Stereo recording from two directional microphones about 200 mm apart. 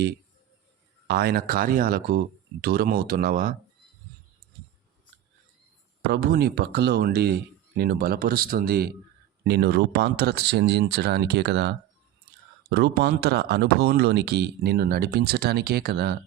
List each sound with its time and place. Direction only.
1.0 s speech: 50° right (ahead or behind)
6.1 s speech: 50° right (ahead or behind)